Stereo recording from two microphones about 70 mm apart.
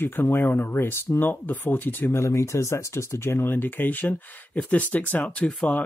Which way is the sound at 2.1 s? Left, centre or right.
Left.